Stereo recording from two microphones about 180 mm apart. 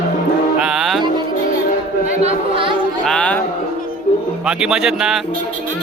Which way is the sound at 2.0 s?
35° right (ahead or behind).